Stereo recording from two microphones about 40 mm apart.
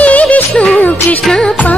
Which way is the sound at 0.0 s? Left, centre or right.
Left.